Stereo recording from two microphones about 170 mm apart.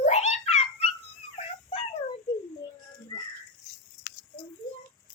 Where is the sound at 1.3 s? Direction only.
35° left (ahead or behind).